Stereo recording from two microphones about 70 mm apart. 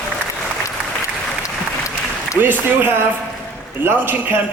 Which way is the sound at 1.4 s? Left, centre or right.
Left.